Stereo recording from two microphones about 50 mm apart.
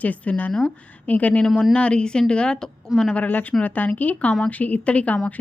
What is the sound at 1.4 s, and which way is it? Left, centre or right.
Speech, centre.